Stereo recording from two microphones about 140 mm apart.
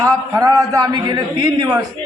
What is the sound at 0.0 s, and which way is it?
A man's voice, 25° right (ahead or behind).